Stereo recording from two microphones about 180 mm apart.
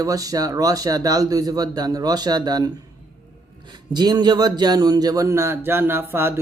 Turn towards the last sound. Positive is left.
turn(degrees=-15)  # may be behind; listen again after turning